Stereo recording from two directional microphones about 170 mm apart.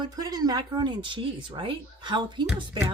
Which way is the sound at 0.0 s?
25° right (ahead or behind).